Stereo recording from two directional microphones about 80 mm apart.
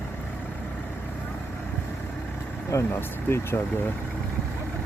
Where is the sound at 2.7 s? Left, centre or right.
Left.